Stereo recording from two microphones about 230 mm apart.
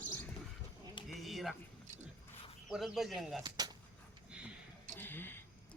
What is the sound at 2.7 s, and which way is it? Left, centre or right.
Speech, centre.